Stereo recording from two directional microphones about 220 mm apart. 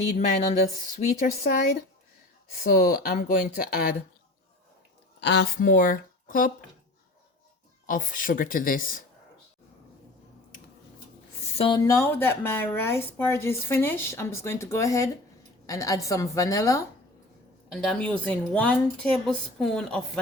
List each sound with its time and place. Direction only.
0.9 s speech: 40° left (ahead or behind)
2.6 s speech: 40° left (ahead or behind)
5.2 s speech: 50° left (ahead or behind)
7.9 s speech: 40° left (ahead or behind)
11.5 s speech: 25° left (ahead or behind)
11.9 s speech: 10° left (ahead or behind)
17.7 s a woman's voice: 5° left (ahead or behind)